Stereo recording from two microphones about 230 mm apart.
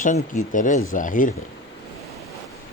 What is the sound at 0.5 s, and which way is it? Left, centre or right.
Speech, left.